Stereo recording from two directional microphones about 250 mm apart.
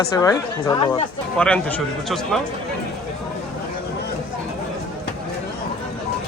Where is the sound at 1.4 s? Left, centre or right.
Centre.